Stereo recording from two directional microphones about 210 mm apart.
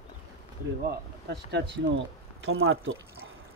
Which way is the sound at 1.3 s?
55° right (ahead or behind).